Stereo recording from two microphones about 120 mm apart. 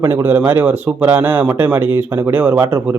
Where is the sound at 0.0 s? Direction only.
20° right (ahead or behind).